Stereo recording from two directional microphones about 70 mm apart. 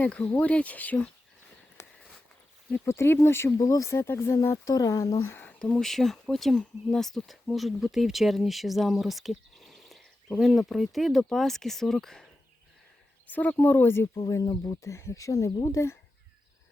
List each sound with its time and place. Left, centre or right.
0.0 s speech: centre
2.8 s speech: left
3.6 s speech: left
4.5 s speech: left
5.2 s speech: left
5.5 s a sound: centre
5.8 s speech: centre
13.2 s speech: left
14.4 s speech: left
14.8 s speech: left